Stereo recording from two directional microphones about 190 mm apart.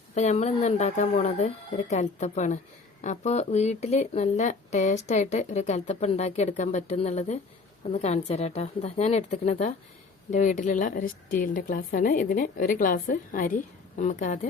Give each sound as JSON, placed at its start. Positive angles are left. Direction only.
{"t": 0.1, "sound": "a woman's voice", "side_deg": 35}